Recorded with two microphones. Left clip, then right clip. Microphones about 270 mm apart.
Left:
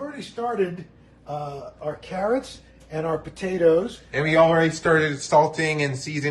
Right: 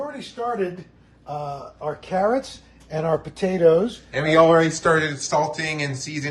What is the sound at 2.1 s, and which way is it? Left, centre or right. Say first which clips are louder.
Speech: right 4 dB; right.